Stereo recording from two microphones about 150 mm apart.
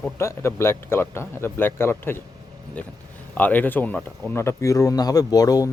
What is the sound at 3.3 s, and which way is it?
Speech, 10° left (ahead or behind).